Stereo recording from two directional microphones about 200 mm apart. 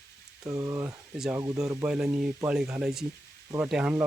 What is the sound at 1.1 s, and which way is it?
Speech, centre (ahead or behind).